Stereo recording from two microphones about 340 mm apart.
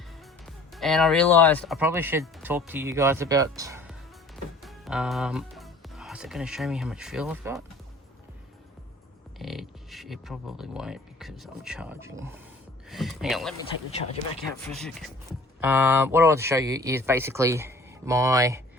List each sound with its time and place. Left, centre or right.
0.4 s speech: centre
9.4 s speech: centre
13.6 s speech: centre
14.6 s speech: centre